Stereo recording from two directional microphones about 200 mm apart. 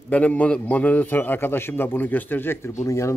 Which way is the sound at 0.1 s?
10° left (ahead or behind).